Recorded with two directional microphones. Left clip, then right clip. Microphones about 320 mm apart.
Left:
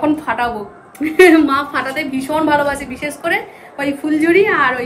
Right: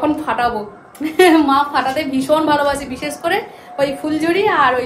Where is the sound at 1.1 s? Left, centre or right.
Right.